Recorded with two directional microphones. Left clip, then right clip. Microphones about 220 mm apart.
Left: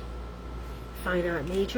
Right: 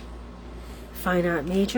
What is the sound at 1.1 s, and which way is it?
Speech, 50° right (ahead or behind).